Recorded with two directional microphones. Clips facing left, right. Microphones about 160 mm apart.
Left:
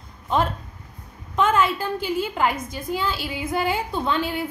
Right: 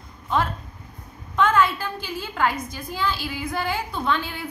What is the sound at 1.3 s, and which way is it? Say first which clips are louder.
A woman's voice: even; 25° left (ahead or behind).